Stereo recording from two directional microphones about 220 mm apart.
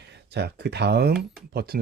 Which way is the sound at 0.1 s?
50° right (ahead or behind).